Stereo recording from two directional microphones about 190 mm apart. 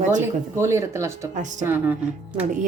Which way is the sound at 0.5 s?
15° right (ahead or behind).